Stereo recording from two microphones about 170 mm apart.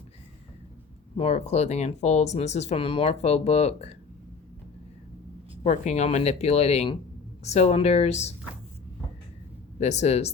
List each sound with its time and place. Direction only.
1.1 s speech: 40° left (ahead or behind)
5.6 s speech: 45° left (ahead or behind)
9.8 s speech: 40° left (ahead or behind)